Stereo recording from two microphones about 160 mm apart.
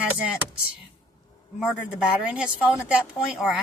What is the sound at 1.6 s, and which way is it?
Speech, 5° right (ahead or behind).